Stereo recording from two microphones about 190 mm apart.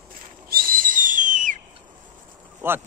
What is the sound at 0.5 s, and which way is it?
Whistle, 50° right (ahead or behind).